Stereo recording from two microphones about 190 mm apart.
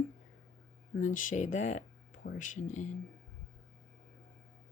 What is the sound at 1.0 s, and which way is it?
Speech, 45° left (ahead or behind).